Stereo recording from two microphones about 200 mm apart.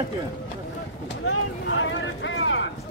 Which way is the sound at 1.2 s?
70° left (ahead or behind).